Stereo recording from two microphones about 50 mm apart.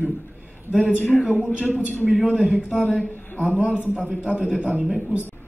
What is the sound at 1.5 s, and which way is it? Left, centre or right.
A man's voice, right.